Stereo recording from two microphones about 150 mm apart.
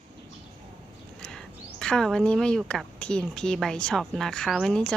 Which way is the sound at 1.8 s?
5° left (ahead or behind).